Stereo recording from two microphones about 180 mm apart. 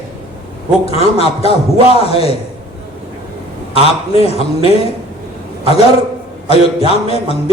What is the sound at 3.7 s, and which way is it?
Speech, 35° left (ahead or behind).